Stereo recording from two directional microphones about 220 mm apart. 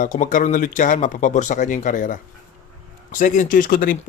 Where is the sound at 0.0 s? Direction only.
35° left (ahead or behind).